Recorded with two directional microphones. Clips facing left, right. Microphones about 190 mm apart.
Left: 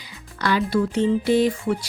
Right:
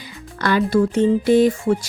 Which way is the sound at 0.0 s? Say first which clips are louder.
Right 3 dB; 50° right (ahead or behind).